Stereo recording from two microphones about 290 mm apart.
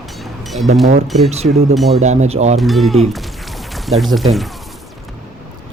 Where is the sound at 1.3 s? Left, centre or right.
Right.